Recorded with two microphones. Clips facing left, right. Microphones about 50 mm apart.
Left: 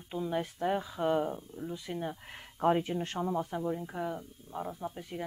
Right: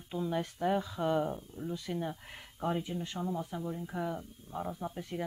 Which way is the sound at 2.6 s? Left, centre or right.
Left.